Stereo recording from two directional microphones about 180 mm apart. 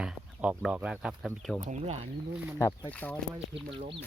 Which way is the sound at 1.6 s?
40° right (ahead or behind).